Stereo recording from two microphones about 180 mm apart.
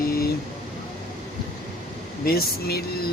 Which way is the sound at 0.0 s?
55° left (ahead or behind).